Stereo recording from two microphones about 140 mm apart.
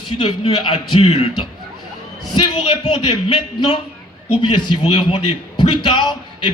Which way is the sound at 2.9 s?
35° left (ahead or behind).